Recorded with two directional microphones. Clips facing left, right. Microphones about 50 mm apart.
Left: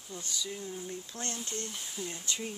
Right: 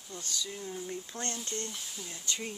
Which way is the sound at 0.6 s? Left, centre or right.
Centre.